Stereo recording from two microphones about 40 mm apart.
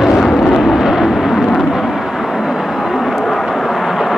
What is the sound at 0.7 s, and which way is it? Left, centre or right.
Vehicle, centre.